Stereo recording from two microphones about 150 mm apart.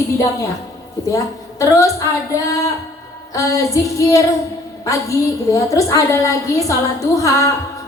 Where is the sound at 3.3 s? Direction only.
20° left (ahead or behind).